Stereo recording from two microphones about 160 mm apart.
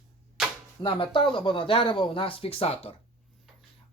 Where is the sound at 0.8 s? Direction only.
30° left (ahead or behind).